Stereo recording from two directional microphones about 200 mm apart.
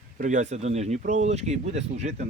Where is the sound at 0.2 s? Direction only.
35° right (ahead or behind).